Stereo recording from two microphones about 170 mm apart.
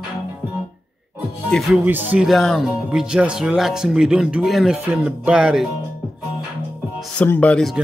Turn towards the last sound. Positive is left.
turn(degrees=10)  # may be behind; listen again after turning